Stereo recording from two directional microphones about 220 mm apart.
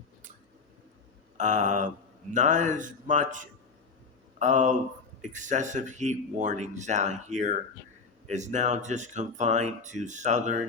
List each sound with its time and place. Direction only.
1.4 s speech: 35° right (ahead or behind)